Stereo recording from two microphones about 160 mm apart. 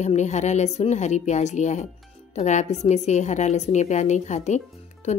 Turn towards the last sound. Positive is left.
turn(degrees=45)  # may be behind; listen again after turning